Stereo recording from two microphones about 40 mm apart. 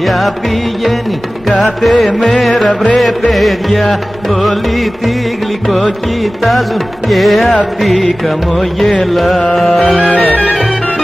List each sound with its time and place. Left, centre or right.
1.6 s music: centre
7.1 s music: centre
9.1 s music: centre
10.0 s music: left